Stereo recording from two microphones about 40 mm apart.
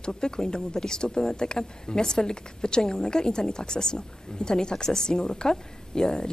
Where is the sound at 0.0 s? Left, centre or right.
Centre.